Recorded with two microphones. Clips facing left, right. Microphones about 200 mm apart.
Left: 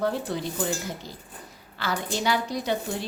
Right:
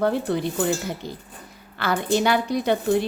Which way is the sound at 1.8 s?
60° right (ahead or behind).